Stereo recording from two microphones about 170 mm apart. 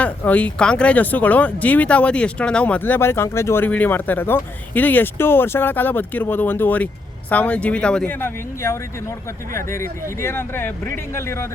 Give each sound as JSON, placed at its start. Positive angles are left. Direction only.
{"t": 0.0, "sound": "speech", "side_deg": 10}